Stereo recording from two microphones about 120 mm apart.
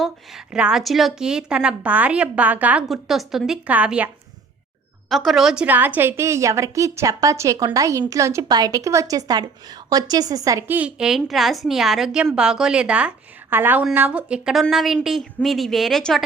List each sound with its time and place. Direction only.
0.0 s a woman's voice: 5° right (ahead or behind)
2.9 s speech: centre (ahead or behind)
5.0 s speech: centre (ahead or behind)
5.6 s a woman's voice: 15° right (ahead or behind); by 10.6 s 30° right (ahead or behind)
10.7 s a woman's voice: 10° right (ahead or behind)